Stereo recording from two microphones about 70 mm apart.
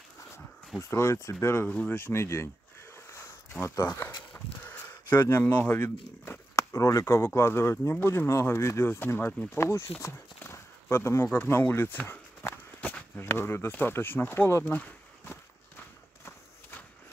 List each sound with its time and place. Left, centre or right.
0.8 s speech: left
1.7 s speech: left
2.0 s speech: left
3.6 s speech: left
4.0 s a sound: left
6.5 s speech: left
9.9 s walk: left
11.3 s speech: left
12.1 s walk: left
13.1 s speech: left
14.6 s a sound: left